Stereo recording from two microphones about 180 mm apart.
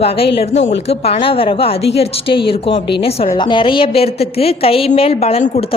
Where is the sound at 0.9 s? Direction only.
30° left (ahead or behind).